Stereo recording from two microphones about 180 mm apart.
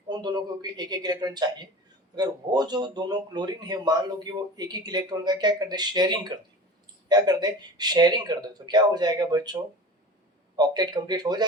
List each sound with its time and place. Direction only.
0.1 s speech: 25° right (ahead or behind)
10.6 s speech: 20° right (ahead or behind)